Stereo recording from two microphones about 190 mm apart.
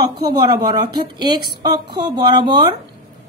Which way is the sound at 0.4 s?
20° right (ahead or behind).